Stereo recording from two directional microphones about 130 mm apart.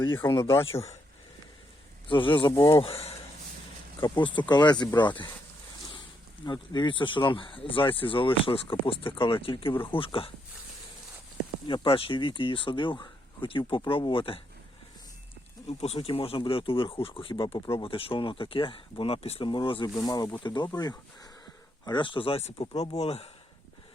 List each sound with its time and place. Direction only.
0.1 s speech: 20° left (ahead or behind)
0.6 s speech: 50° left (ahead or behind)
2.0 s speech: 40° left (ahead or behind)
2.6 s speech: 25° left (ahead or behind)
2.8 s speech: 50° left (ahead or behind)
4.0 s speech: 35° left (ahead or behind)
6.4 s speech: 35° left (ahead or behind)
11.6 s speech: 40° left (ahead or behind)
15.6 s speech: 50° left (ahead or behind)
21.8 s speech: 40° left (ahead or behind)